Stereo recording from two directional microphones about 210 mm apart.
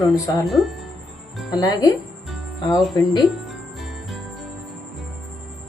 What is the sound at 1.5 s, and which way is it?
Speech, 20° left (ahead or behind).